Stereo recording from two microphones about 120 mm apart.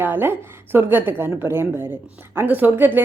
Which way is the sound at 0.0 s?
15° right (ahead or behind).